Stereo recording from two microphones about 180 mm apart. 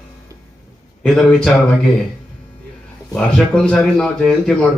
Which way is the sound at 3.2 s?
5° left (ahead or behind).